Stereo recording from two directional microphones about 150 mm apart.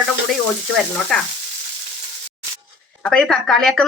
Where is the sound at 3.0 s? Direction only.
5° left (ahead or behind).